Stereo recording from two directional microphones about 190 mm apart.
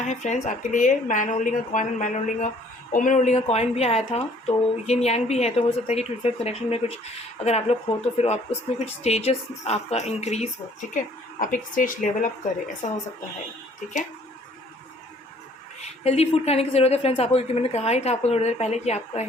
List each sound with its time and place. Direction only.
0.1 s speech: 40° left (ahead or behind)
15.8 s speech: 35° left (ahead or behind)